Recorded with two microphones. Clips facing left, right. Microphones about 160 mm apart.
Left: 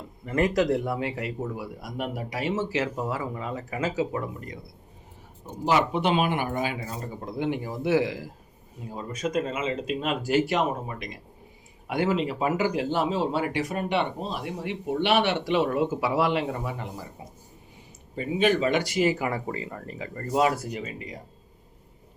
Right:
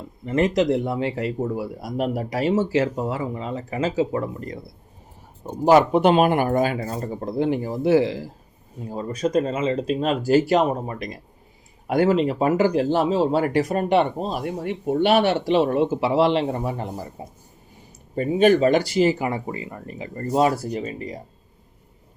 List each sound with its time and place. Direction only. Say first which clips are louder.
0.3 s speech: right 4 dB; 25° right (ahead or behind)
5.5 s speech: right 8 dB; 45° right (ahead or behind)
18.1 s speech: right 7 dB; 45° right (ahead or behind)